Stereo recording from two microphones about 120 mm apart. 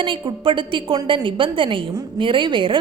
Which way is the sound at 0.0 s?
45° right (ahead or behind).